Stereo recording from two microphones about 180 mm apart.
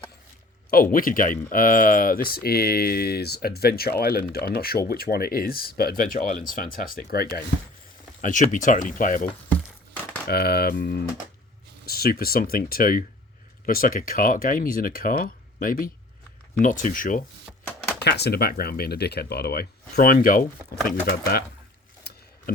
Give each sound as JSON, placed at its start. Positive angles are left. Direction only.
{"t": 0.7, "sound": "speech", "side_deg": 50}
{"t": 8.2, "sound": "speech", "side_deg": 45}
{"t": 9.5, "sound": "a sound", "side_deg": 10}
{"t": 10.2, "sound": "speech", "side_deg": 60}
{"t": 18.0, "sound": "speech", "side_deg": 65}